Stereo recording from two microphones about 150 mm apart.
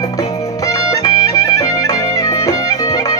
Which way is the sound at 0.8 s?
20° left (ahead or behind).